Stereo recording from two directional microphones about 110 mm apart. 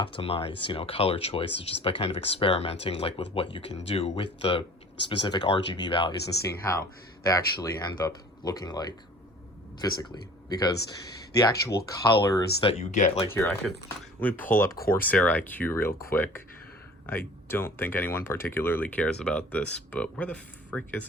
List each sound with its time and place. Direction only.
0.0 s speech: 50° left (ahead or behind)
3.8 s speech: 65° left (ahead or behind); by 6.1 s 45° left (ahead or behind)
6.2 s speech: 30° left (ahead or behind)
12.6 s speech: 85° left
14.2 s speech: 15° left (ahead or behind)